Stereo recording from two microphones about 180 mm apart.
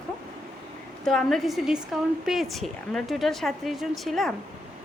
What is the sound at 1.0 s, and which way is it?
A woman's voice, centre (ahead or behind).